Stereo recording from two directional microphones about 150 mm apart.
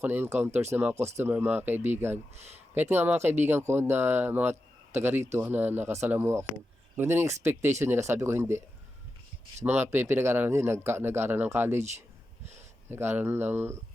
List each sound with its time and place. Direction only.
0.0 s speech: 15° right (ahead or behind)
2.3 s speech: 45° right (ahead or behind)
2.7 s speech: 15° right (ahead or behind)
9.6 s speech: 15° right (ahead or behind)
12.9 s speech: 15° right (ahead or behind)